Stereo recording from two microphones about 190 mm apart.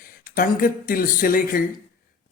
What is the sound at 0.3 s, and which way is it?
Speech, 50° left (ahead or behind).